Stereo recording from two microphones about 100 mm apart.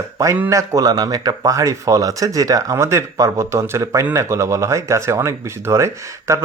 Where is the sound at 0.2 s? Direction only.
30° right (ahead or behind).